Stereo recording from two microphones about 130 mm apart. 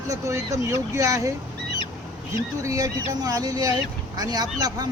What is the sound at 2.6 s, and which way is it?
Speech, 25° right (ahead or behind).